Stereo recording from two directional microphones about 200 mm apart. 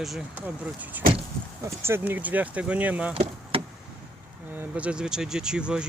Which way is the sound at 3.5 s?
25° right (ahead or behind).